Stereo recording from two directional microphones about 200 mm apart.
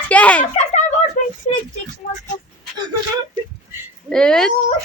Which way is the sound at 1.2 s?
45° left (ahead or behind).